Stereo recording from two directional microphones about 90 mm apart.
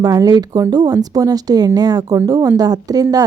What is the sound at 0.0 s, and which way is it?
A woman's voice, 45° right (ahead or behind).